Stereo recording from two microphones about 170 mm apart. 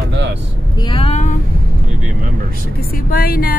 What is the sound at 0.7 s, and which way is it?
Speech, 30° left (ahead or behind).